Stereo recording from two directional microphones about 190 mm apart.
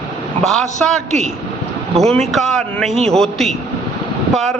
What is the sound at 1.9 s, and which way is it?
A woman's voice, 5° left (ahead or behind).